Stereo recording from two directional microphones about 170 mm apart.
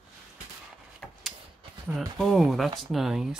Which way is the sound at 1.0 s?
5° left (ahead or behind).